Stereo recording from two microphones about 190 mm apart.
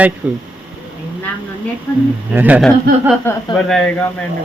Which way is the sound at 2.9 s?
50° right (ahead or behind).